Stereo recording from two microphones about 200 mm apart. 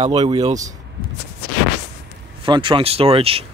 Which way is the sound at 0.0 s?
25° right (ahead or behind).